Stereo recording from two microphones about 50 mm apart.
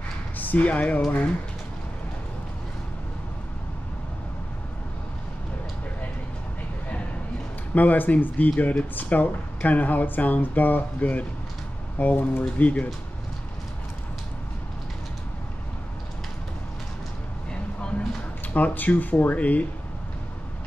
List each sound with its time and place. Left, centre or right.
0.4 s speech: left
7.7 s speech: left
18.5 s speech: left